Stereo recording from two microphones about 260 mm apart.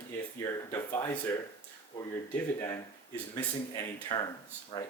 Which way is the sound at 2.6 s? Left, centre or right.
Centre.